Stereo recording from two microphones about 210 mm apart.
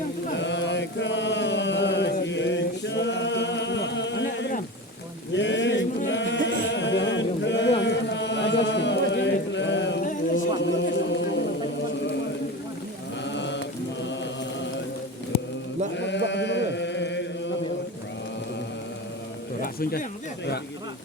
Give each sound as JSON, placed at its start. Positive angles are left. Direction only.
{"t": 0.3, "sound": "chant", "side_deg": 60}
{"t": 2.2, "sound": "singing", "side_deg": 60}
{"t": 5.3, "sound": "a sound", "side_deg": 60}
{"t": 6.1, "sound": "a capella", "side_deg": 55}
{"t": 7.8, "sound": "chant", "side_deg": 55}
{"t": 10.3, "sound": "a sound", "side_deg": 60}
{"t": 13.2, "sound": "mantra", "side_deg": 60}
{"t": 16.0, "sound": "chant", "side_deg": 55}
{"t": 19.6, "sound": "a sound", "side_deg": 45}